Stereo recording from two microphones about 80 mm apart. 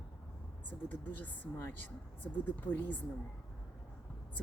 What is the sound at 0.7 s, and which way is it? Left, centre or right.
Speech, left.